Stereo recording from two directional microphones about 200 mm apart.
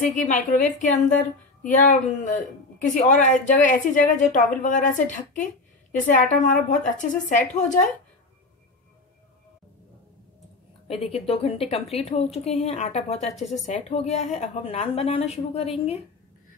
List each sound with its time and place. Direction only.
0.1 s a woman's voice: 35° left (ahead or behind)
10.9 s a woman's voice: 30° left (ahead or behind)